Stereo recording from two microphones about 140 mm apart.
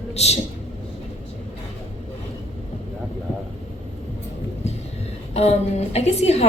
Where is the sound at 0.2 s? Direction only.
50° left (ahead or behind).